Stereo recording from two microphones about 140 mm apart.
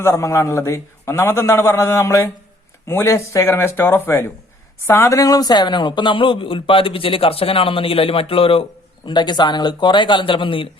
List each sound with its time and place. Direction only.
0.0 s a man's voice: 20° left (ahead or behind); by 10.7 s 35° left (ahead or behind)